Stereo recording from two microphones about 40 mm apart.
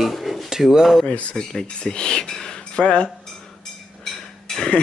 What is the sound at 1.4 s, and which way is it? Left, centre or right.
Speech, centre.